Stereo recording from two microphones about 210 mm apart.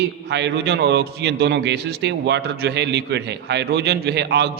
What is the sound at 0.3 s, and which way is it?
A man's voice, 55° right (ahead or behind).